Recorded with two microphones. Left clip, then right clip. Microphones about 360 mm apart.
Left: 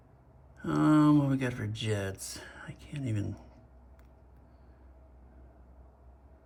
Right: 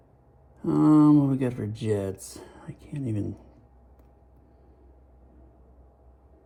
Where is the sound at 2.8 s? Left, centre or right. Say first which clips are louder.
Right 6 dB; centre.